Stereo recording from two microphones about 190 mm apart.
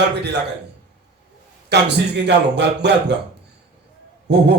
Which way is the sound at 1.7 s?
60° right (ahead or behind).